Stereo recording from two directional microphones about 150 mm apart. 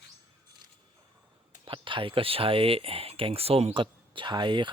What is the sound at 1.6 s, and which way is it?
Speech, 35° right (ahead or behind).